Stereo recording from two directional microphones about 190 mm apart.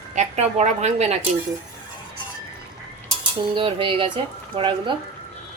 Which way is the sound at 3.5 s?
25° right (ahead or behind).